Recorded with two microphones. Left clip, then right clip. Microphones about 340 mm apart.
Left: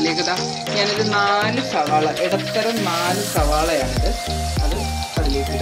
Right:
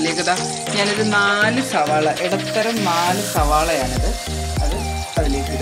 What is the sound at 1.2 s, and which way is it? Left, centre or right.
Music, right.